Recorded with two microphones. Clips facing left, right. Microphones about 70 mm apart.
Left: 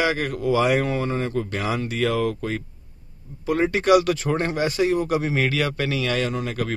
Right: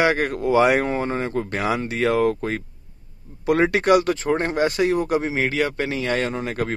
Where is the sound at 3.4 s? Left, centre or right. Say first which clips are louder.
Right 3 dB; right.